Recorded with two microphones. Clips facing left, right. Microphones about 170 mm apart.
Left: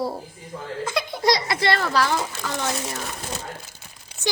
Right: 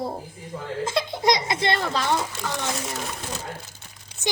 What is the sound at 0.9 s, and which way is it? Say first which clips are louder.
Giggle: even; 20° right (ahead or behind).